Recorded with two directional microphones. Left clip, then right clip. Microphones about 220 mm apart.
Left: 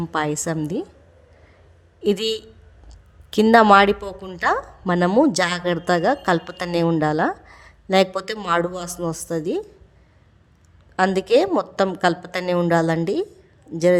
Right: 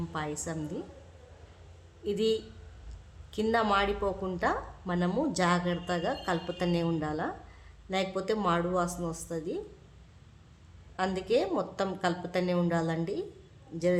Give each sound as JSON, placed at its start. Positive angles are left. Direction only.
{"t": 0.1, "sound": "a woman's voice", "side_deg": 45}
{"t": 2.0, "sound": "a woman's voice", "side_deg": 45}
{"t": 10.9, "sound": "a woman's voice", "side_deg": 45}